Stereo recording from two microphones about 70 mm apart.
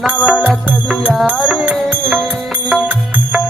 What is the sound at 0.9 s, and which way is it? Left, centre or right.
Music, centre.